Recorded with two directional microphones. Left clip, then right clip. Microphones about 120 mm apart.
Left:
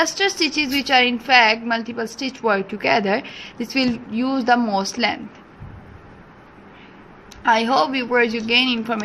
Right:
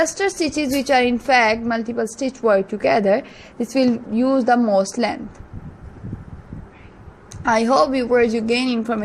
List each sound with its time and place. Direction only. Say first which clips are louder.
0.0 s a woman's voice: left 1 dB; 40° right (ahead or behind)
7.4 s a woman's voice: right 1 dB; 55° right (ahead or behind)